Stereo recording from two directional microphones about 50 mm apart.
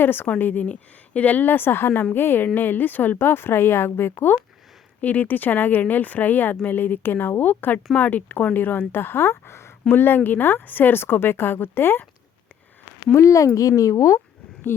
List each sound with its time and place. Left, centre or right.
0.0 s speech: left
0.3 s a woman's voice: left
4.9 s a woman's voice: left
9.3 s speech: left
9.9 s speech: left
13.1 s speech: left